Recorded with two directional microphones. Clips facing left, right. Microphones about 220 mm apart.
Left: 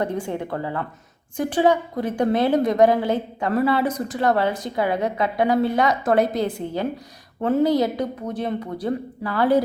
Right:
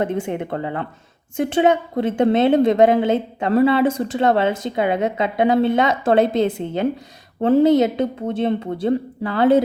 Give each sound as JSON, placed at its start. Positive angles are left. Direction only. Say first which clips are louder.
{"t": 0.0, "sound": "a woman's voice", "louder": "right 3 dB", "side_deg": -20}